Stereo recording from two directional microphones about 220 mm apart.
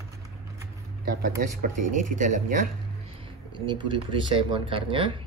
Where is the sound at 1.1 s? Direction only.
45° right (ahead or behind).